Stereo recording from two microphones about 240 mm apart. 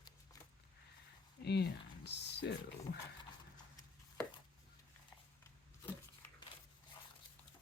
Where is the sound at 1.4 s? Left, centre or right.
Left.